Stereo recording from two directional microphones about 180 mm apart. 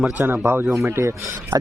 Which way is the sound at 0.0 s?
10° right (ahead or behind).